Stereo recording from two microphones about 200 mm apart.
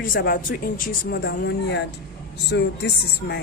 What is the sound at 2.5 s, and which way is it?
Speech, 70° left (ahead or behind).